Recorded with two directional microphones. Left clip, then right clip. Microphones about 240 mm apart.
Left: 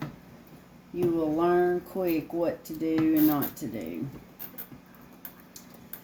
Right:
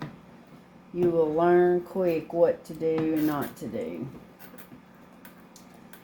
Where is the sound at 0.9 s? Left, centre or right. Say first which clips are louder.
Right 3 dB; centre.